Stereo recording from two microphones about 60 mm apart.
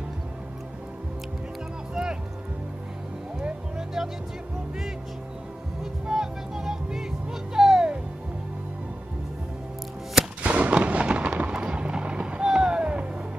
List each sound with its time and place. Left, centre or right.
3.4 s music: centre
6.0 s music: centre
10.4 s artillery fire: right